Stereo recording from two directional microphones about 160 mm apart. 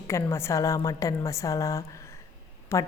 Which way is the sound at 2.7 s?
20° left (ahead or behind).